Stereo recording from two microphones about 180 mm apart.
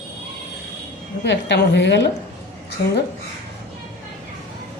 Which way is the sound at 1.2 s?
75° left (ahead or behind).